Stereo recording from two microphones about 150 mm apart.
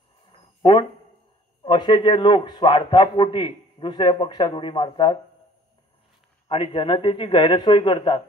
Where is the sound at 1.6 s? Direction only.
30° left (ahead or behind).